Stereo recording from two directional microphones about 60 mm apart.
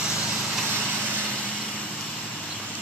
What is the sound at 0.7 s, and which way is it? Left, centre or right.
Vehicle, right.